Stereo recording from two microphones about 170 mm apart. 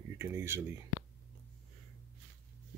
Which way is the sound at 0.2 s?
15° right (ahead or behind).